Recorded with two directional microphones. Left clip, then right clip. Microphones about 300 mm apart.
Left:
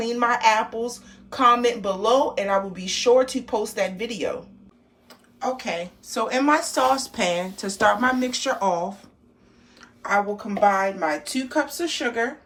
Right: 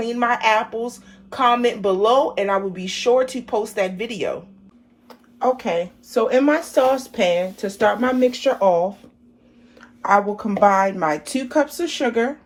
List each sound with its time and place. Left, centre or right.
0.0 s a woman's voice: centre
9.8 s a woman's voice: centre